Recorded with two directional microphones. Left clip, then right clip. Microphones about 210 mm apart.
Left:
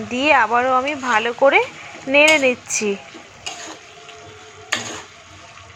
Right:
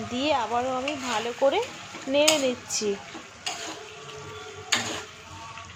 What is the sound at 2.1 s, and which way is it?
Speech, 5° left (ahead or behind).